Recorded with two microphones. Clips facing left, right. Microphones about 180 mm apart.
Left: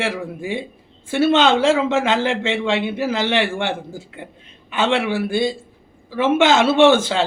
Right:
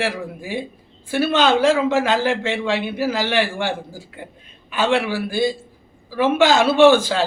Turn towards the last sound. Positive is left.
turn(degrees=25)  # may be behind; listen again after turning